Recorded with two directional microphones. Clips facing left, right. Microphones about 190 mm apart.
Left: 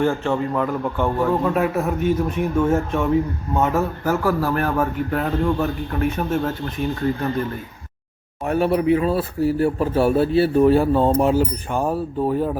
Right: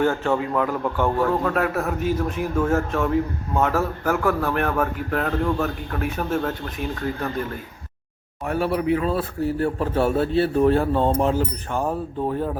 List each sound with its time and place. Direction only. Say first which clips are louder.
0.0 s a man's voice: left 1 dB; centre (ahead or behind)
8.4 s speech: left 4 dB; 20° left (ahead or behind)
9.0 s speech: left 3 dB; 5° left (ahead or behind)